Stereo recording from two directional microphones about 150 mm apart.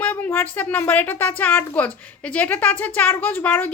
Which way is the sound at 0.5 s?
10° left (ahead or behind).